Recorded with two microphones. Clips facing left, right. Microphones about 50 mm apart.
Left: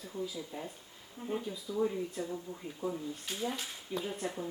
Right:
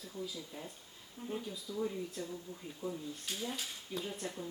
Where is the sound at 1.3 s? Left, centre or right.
Centre.